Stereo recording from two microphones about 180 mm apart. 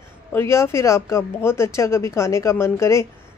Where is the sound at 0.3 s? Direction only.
15° left (ahead or behind).